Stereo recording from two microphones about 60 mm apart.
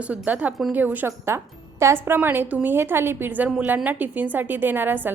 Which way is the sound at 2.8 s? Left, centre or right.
Right.